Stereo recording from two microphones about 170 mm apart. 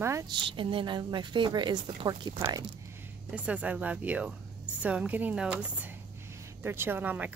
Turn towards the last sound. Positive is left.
turn(degrees=-10)  # may be behind; listen again after turning